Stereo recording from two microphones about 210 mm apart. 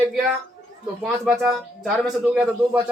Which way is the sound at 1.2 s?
5° right (ahead or behind).